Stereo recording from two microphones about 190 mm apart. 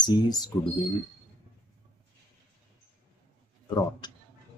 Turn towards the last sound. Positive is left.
turn(degrees=20)  # may be behind; listen again after turning